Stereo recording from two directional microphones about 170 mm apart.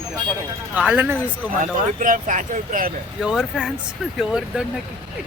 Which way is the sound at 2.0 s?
50° right (ahead or behind).